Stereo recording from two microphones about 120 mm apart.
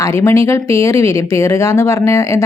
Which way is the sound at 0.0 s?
25° left (ahead or behind).